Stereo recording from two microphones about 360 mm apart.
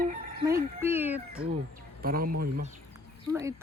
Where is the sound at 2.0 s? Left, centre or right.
Right.